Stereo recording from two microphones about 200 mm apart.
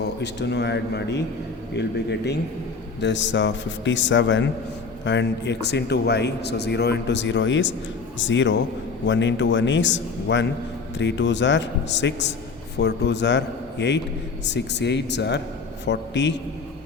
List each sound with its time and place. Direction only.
0.2 s a man's voice: 60° left (ahead or behind)